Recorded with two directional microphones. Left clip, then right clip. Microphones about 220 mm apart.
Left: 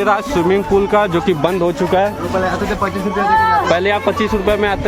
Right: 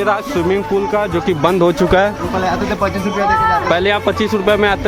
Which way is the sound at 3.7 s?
10° right (ahead or behind).